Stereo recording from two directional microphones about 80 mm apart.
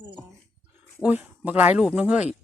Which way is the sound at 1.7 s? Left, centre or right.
Centre.